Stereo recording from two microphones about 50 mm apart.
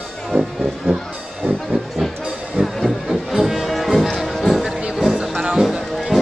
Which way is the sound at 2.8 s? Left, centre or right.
Centre.